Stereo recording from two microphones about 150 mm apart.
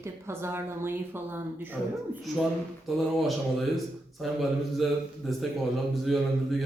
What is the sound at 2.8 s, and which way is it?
A man's voice, centre (ahead or behind).